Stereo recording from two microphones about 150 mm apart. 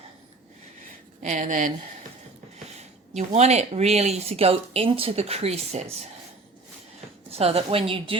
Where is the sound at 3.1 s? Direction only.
45° right (ahead or behind).